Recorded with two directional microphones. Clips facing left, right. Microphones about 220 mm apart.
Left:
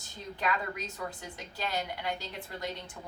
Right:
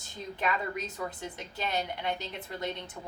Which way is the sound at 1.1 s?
20° right (ahead or behind).